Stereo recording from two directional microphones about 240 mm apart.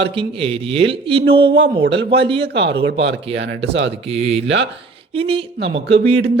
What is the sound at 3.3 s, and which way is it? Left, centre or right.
Speech, right.